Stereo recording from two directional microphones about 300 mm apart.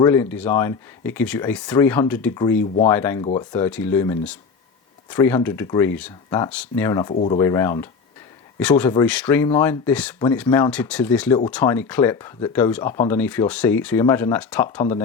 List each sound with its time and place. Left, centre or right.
0.0 s speech: centre
7.1 s speech: left
7.3 s speech: centre